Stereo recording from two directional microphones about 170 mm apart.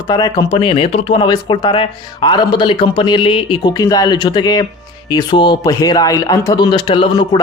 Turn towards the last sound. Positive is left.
turn(degrees=25)  # may be behind; listen again after turning